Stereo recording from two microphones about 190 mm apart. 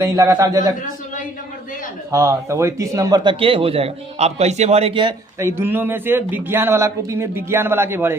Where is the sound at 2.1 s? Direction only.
15° right (ahead or behind).